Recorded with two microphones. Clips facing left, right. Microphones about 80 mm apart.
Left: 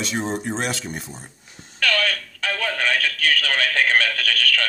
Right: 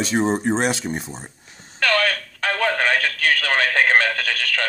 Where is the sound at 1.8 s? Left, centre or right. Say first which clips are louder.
Right 3 dB; right.